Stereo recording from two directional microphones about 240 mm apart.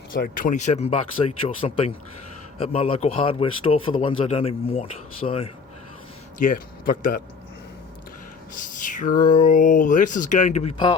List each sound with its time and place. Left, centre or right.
0.1 s a man's voice: left
8.5 s speech: left